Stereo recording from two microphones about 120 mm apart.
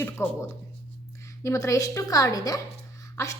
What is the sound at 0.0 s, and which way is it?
A woman's voice, 20° left (ahead or behind).